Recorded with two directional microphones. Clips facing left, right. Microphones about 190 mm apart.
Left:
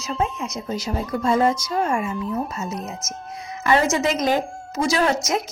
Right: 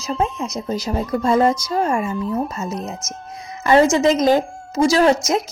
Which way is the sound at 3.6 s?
35° right (ahead or behind).